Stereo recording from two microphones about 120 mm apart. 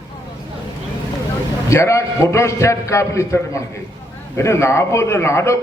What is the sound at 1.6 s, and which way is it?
A man's voice, 25° left (ahead or behind).